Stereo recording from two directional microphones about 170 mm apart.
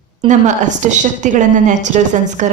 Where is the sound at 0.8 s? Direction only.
45° right (ahead or behind).